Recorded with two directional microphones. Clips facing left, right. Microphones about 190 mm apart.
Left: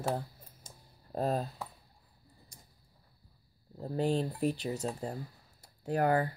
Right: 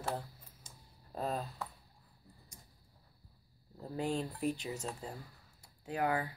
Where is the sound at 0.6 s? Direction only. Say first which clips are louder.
Left 3 dB; 40° left (ahead or behind).